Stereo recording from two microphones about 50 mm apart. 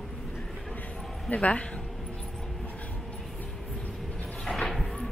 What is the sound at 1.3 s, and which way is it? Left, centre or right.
Speech, left.